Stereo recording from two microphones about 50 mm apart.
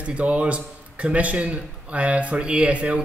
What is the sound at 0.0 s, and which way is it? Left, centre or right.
Speech, right.